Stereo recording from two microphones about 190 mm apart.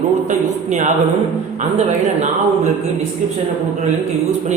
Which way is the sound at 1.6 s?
35° right (ahead or behind).